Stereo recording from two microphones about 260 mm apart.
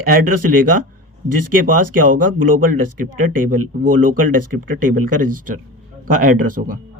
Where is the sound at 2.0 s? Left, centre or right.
Right.